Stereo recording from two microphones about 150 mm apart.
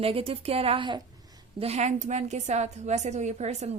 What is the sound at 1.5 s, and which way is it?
A woman's voice, 45° right (ahead or behind).